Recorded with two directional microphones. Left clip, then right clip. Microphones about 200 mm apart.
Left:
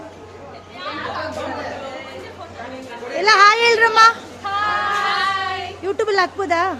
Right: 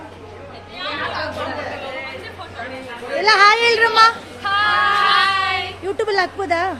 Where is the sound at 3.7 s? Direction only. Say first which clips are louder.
Left 1 dB; 10° left (ahead or behind).